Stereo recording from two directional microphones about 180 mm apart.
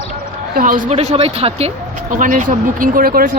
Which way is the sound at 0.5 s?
45° right (ahead or behind).